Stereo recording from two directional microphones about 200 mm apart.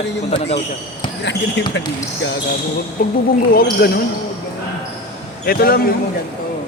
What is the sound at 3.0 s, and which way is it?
Speech, 50° left (ahead or behind).